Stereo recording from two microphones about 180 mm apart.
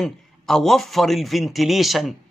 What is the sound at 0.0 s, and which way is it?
A man's voice, centre (ahead or behind).